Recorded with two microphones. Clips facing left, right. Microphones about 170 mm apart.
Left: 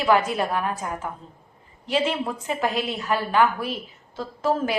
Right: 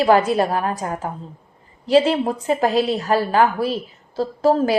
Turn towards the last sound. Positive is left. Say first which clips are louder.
# right 7 dB
turn(degrees=-35)  # may be behind; listen again after turning